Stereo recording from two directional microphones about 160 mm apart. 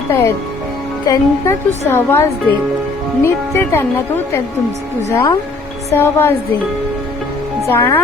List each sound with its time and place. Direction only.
0.1 s a woman's voice: 15° left (ahead or behind)
3.7 s a woman's voice: 15° left (ahead or behind)
7.7 s a woman's voice: 15° left (ahead or behind)